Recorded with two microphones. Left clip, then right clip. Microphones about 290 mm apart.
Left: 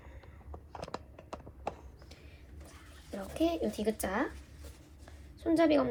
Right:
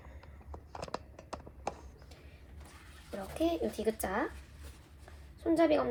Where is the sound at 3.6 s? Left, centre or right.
Centre.